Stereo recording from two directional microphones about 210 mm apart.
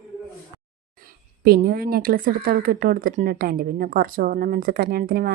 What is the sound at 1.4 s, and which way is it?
Speech, 45° right (ahead or behind).